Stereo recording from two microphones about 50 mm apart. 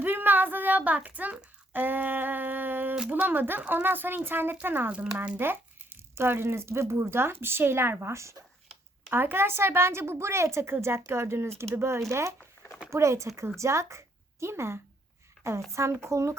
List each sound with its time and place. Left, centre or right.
0.0 s child singing: right
1.7 s a sound: right
3.8 s speech: right
9.0 s speech: right
15.7 s speech: right